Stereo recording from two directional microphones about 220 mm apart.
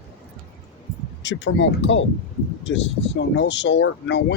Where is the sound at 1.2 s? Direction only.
55° left (ahead or behind).